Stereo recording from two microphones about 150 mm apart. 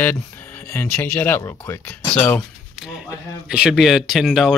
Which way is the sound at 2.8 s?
Centre (ahead or behind).